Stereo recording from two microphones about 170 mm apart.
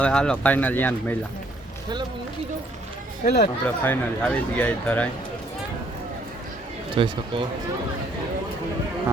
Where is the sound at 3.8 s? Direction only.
10° left (ahead or behind).